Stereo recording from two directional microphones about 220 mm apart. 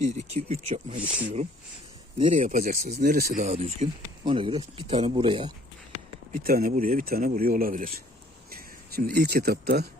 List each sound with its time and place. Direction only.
0.0 s speech: 30° right (ahead or behind)
2.2 s speech: 35° right (ahead or behind)
6.3 s speech: 40° right (ahead or behind)